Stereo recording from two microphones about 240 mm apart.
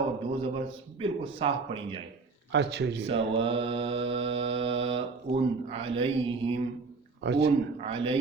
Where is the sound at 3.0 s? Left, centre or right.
Right.